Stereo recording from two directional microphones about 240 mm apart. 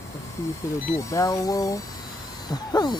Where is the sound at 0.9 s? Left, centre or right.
Centre.